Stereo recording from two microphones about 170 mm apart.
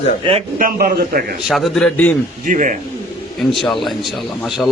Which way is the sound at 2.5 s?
50° right (ahead or behind).